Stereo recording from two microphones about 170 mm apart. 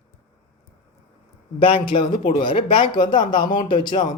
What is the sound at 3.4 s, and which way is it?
Speech, 50° left (ahead or behind).